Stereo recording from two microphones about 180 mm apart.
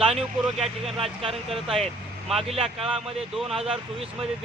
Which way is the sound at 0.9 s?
30° right (ahead or behind).